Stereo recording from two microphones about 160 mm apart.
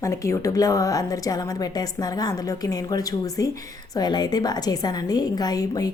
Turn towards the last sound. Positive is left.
turn(degrees=25)  # may be behind; listen again after turning